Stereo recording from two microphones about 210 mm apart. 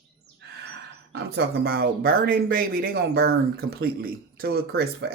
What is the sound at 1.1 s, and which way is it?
Speech, 50° right (ahead or behind).